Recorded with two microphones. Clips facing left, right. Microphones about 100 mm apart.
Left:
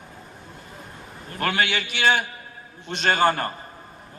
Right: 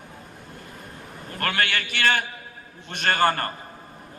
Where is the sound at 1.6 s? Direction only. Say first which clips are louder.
Left 2 dB; 55° right (ahead or behind).